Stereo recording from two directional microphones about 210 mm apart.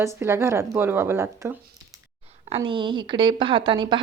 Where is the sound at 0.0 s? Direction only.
10° right (ahead or behind).